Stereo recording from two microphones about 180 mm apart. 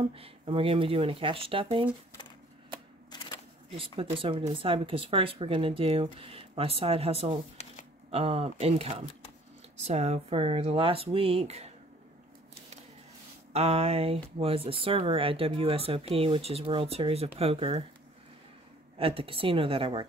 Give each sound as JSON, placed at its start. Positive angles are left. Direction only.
{"t": 0.1, "sound": "speech", "side_deg": -30}
{"t": 3.1, "sound": "a sound", "side_deg": 25}
{"t": 3.7, "sound": "speech", "side_deg": -30}
{"t": 13.5, "sound": "speech", "side_deg": -35}
{"t": 18.9, "sound": "a woman's voice", "side_deg": -30}